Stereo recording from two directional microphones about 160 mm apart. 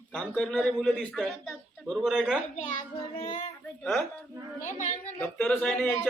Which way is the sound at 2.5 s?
50° left (ahead or behind).